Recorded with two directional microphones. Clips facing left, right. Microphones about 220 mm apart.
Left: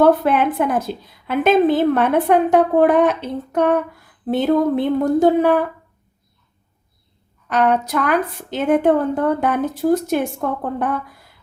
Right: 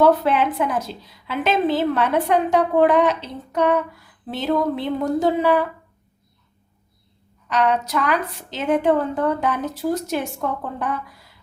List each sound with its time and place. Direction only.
0.0 s a woman's voice: 50° left (ahead or behind)
7.4 s a woman's voice: 50° left (ahead or behind)